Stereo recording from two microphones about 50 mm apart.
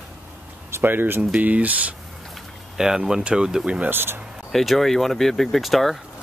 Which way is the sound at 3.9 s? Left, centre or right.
Right.